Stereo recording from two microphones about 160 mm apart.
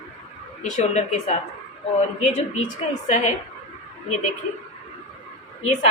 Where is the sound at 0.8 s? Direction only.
45° left (ahead or behind).